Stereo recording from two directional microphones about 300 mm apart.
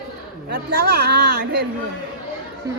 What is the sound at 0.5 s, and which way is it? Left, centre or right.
A woman's voice, right.